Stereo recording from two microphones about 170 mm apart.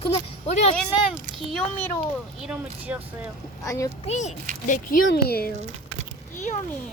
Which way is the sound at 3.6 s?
20° left (ahead or behind).